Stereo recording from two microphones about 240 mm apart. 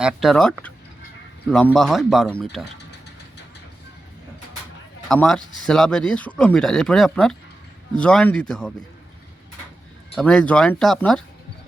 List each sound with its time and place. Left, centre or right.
0.0 s speech: centre
2.7 s vehicle: left
5.0 s speech: centre
10.2 s speech: centre